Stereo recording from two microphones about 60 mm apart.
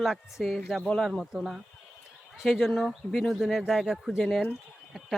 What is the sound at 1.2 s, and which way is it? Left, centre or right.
Speech, centre.